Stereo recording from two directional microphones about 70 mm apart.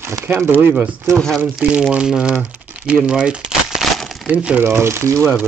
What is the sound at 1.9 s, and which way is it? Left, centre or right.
Speech, centre.